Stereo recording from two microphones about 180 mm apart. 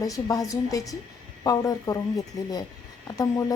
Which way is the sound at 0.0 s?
20° left (ahead or behind).